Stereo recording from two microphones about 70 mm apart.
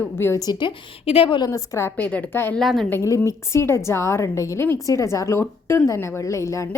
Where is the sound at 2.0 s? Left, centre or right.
Centre.